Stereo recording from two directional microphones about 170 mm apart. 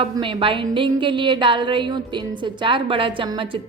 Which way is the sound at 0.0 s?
30° right (ahead or behind).